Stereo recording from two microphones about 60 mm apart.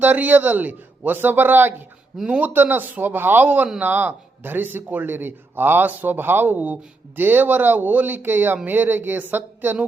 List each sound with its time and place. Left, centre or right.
0.0 s a man's voice: right
2.2 s a man's voice: right
2.5 s a man's voice: right